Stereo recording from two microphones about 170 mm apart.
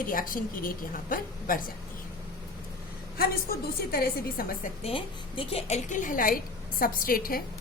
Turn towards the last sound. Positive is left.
turn(degrees=60)  # may be behind; listen again after turning